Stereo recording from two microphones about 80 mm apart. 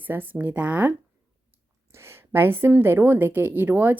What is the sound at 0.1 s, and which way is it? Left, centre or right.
Speech, right.